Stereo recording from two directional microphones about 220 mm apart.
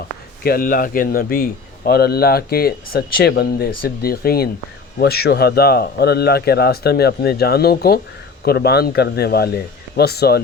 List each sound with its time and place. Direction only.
0.4 s speech: 40° left (ahead or behind)